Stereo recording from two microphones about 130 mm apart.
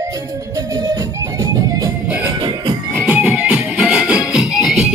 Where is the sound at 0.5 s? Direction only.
30° right (ahead or behind).